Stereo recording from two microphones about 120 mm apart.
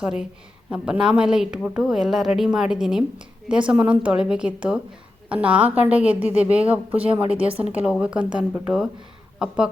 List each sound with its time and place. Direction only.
0.0 s a woman's voice: 5° right (ahead or behind)
6.9 s speech: 50° right (ahead or behind)
7.7 s speech: 10° right (ahead or behind)